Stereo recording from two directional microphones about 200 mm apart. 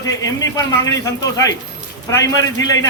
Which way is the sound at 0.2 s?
15° left (ahead or behind).